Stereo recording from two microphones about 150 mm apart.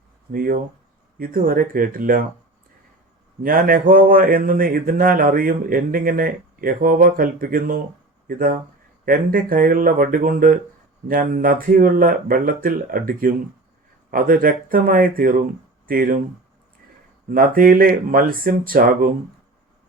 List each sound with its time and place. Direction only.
0.3 s speech: 70° right (ahead or behind)
3.4 s speech: 70° right (ahead or behind)
17.2 s speech: 70° right (ahead or behind)